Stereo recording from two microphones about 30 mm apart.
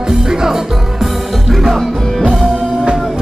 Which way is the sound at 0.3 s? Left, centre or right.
Centre.